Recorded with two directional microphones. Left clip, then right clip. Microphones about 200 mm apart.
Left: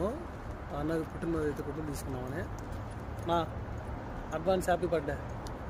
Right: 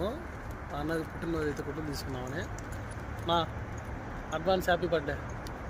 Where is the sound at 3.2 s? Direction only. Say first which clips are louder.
Right 2 dB; 5° left (ahead or behind).